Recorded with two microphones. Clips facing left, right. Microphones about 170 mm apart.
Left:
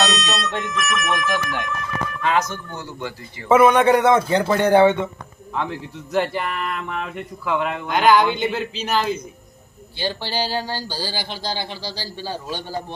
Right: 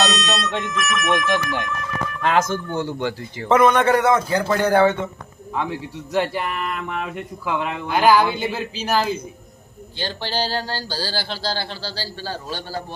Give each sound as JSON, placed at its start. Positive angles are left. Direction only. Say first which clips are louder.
{"t": 0.0, "sound": "a sound", "louder": "right 1 dB", "side_deg": 0}
{"t": 2.7, "sound": "speech", "louder": "right 7 dB", "side_deg": -85}
{"t": 3.5, "sound": "a man's voice", "louder": "left 2 dB", "side_deg": 10}
{"t": 5.5, "sound": "speech", "louder": "right 1 dB", "side_deg": -10}
{"t": 10.0, "sound": "speech", "louder": "left 1 dB", "side_deg": 10}